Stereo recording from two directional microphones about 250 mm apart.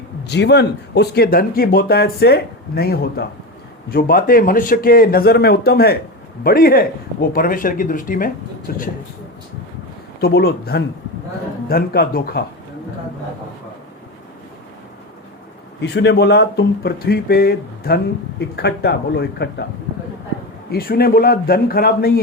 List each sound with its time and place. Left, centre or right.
0.3 s speech: left
10.2 s speech: left
15.8 s speech: left
20.7 s speech: left